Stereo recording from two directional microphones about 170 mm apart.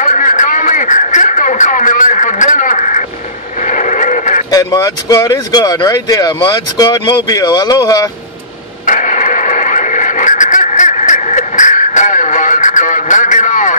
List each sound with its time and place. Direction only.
0.0 s a sound: 50° left (ahead or behind)
3.6 s radio: 45° left (ahead or behind)
4.5 s speech: 20° left (ahead or behind)
8.8 s radio: 50° left (ahead or behind)